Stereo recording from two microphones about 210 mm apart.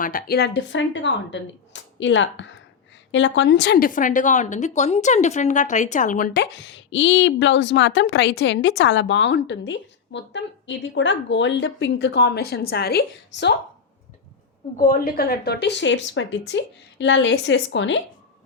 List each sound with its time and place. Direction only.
0.0 s a woman's voice: 40° left (ahead or behind)
14.8 s a woman's voice: 40° left (ahead or behind); by 18.0 s 60° left (ahead or behind)